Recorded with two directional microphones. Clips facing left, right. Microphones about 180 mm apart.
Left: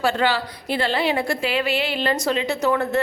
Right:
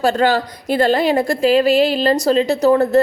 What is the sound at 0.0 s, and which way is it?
A woman's voice, 45° right (ahead or behind).